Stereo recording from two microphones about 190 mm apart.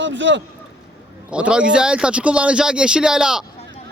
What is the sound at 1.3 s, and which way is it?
Speech, 5° right (ahead or behind).